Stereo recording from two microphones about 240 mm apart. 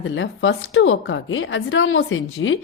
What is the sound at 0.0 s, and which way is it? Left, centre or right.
A woman's voice, left.